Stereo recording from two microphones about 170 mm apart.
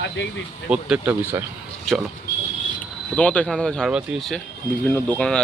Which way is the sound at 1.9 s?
Centre (ahead or behind).